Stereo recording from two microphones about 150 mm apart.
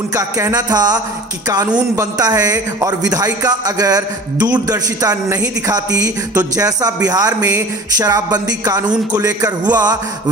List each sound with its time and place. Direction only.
0.1 s speech: 25° right (ahead or behind)